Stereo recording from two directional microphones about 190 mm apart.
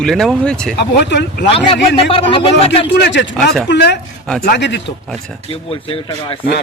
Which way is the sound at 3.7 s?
60° left (ahead or behind).